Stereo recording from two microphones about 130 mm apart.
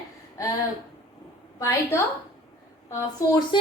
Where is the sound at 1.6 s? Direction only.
20° left (ahead or behind).